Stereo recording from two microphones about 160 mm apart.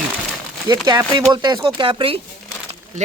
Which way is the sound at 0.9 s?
25° right (ahead or behind).